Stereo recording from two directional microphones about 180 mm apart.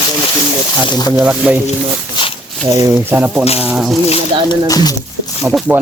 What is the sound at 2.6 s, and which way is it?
Speech, 20° right (ahead or behind).